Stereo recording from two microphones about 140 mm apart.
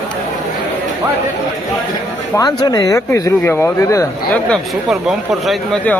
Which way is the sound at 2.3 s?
25° left (ahead or behind).